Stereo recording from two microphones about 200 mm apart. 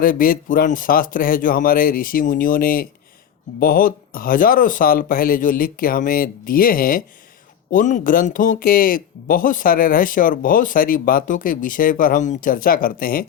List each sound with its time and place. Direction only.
0.0 s speech: 45° left (ahead or behind)